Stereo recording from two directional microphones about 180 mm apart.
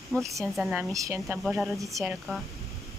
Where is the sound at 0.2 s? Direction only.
15° right (ahead or behind).